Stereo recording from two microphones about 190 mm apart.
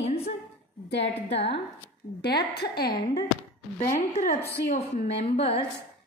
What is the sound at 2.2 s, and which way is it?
Speech, 60° left (ahead or behind).